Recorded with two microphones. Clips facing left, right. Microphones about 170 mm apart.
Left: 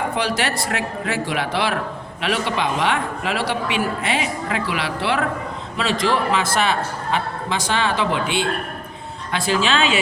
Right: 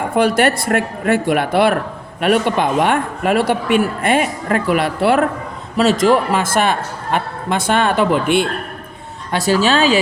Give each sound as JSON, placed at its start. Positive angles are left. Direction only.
{"t": 0.1, "sound": "speech", "side_deg": -50}
{"t": 9.5, "sound": "speech", "side_deg": -40}